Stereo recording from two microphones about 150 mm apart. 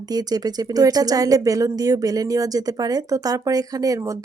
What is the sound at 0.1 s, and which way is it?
Speech, 25° right (ahead or behind).